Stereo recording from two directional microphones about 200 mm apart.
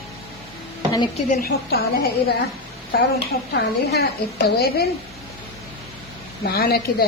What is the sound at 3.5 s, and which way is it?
A woman's voice, 55° left (ahead or behind).